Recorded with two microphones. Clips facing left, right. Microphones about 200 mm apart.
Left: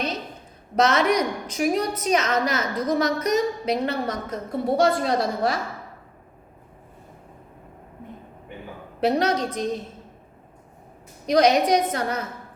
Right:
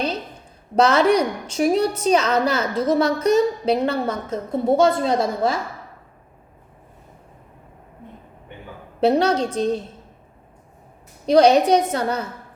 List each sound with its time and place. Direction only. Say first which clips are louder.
0.8 s a woman's voice: right 4 dB; 30° right (ahead or behind)
9.0 s a woman's voice: right 4 dB; 30° right (ahead or behind)
11.3 s a woman's voice: right 4 dB; 30° right (ahead or behind)